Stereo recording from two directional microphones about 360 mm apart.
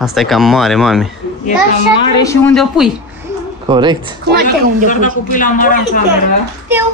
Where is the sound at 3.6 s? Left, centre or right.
Centre.